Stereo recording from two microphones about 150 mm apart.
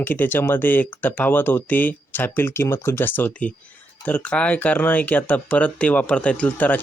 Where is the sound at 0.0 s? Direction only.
15° left (ahead or behind).